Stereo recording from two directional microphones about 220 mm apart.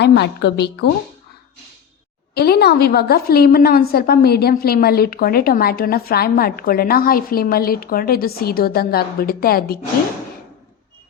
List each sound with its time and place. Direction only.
0.0 s a woman's voice: 50° left (ahead or behind)
2.3 s a woman's voice: 45° left (ahead or behind)